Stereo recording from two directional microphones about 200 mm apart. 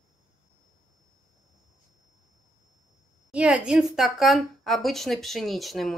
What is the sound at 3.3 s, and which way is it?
A woman's voice, 5° right (ahead or behind).